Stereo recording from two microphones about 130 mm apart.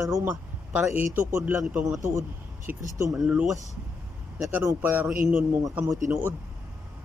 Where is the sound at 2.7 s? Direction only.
15° right (ahead or behind).